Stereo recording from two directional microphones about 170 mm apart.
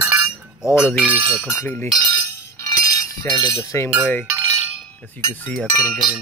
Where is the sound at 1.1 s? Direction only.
10° left (ahead or behind).